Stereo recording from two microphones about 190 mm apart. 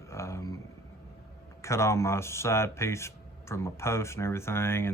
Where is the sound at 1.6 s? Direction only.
15° left (ahead or behind).